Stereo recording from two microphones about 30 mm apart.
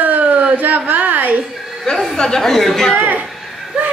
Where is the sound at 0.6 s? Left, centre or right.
Right.